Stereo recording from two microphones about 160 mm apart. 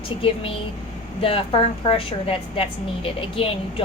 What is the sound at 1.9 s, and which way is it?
A woman's voice, 35° left (ahead or behind).